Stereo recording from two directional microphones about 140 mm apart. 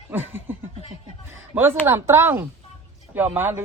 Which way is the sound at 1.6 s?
15° right (ahead or behind).